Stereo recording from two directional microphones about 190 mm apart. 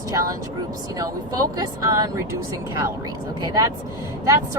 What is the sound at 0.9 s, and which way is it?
Speech, 20° right (ahead or behind).